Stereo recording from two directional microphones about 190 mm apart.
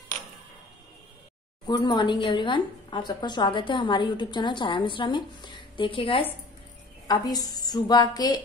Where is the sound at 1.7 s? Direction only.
25° left (ahead or behind).